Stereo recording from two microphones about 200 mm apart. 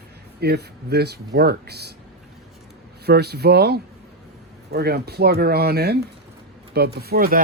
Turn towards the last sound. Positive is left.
turn(degrees=-50)  # may be behind; listen again after turning